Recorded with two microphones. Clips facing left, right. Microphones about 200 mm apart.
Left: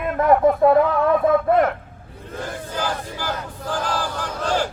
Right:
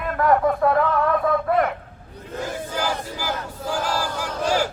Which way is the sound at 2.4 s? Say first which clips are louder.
Even; 10° right (ahead or behind).